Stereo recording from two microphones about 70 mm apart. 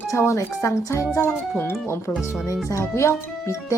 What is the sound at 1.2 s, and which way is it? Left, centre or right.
Speech, left.